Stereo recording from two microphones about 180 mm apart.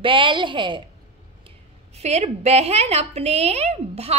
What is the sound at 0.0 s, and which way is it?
Speech, 30° right (ahead or behind).